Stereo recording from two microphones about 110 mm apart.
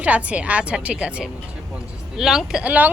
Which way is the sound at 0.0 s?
10° right (ahead or behind).